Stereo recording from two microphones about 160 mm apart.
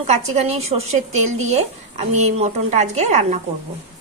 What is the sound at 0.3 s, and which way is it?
Speech, 40° right (ahead or behind).